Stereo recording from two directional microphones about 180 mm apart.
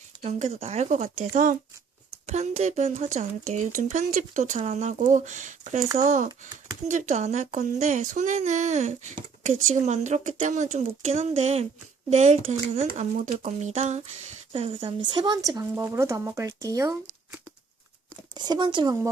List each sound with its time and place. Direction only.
0.2 s speech: 40° right (ahead or behind); by 16.9 s 20° right (ahead or behind)
18.3 s speech: 25° right (ahead or behind)